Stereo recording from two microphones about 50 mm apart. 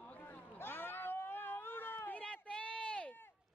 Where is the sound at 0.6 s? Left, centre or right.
Left.